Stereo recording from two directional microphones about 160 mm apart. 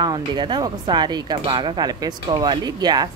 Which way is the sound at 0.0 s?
25° right (ahead or behind).